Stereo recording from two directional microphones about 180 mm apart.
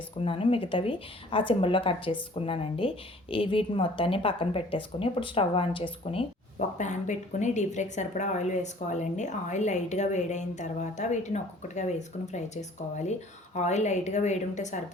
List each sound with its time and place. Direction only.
0.2 s speech: 30° left (ahead or behind)
6.7 s a woman's voice: 40° left (ahead or behind)